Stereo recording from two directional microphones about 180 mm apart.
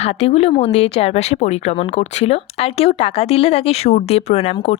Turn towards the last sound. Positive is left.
turn(degrees=35)  # may be behind; listen again after turning